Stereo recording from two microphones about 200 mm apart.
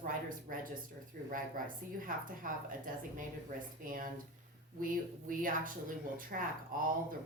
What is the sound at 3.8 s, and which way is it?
Speech, 45° right (ahead or behind).